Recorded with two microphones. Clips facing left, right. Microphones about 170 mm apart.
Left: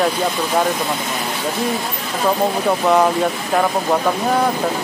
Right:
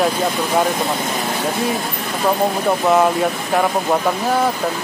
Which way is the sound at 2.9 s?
Centre (ahead or behind).